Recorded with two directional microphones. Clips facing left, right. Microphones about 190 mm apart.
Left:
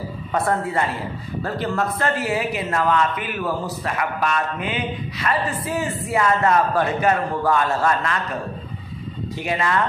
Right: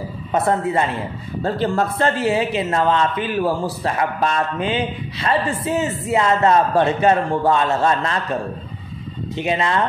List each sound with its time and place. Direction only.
0.3 s speech: 20° right (ahead or behind)